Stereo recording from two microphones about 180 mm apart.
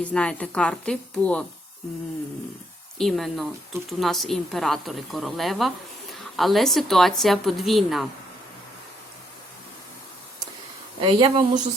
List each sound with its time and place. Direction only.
0.0 s speech: 5° left (ahead or behind)
3.0 s speech: centre (ahead or behind)
11.0 s speech: 25° right (ahead or behind)